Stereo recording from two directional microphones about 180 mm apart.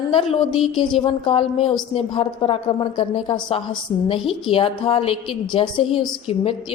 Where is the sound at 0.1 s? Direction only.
30° left (ahead or behind).